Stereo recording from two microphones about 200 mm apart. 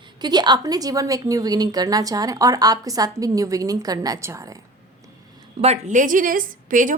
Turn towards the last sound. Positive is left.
turn(degrees=-40)  # may be behind; listen again after turning